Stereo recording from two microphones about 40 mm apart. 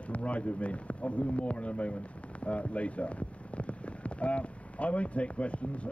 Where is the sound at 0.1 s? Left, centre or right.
Left.